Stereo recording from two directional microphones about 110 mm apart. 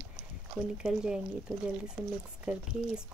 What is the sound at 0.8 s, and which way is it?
Speech, 5° right (ahead or behind).